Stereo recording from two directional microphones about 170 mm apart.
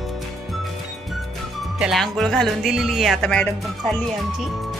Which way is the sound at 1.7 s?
Centre (ahead or behind).